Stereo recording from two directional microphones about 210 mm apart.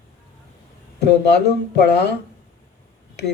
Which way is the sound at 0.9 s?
55° left (ahead or behind).